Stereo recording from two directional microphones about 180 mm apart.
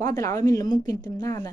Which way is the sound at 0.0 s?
20° left (ahead or behind).